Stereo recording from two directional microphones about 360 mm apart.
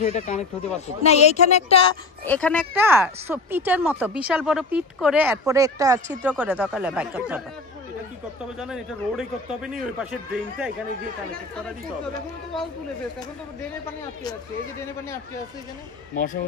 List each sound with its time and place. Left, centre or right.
0.0 s speech: centre
2.2 s a man's voice: centre
8.5 s a man's voice: centre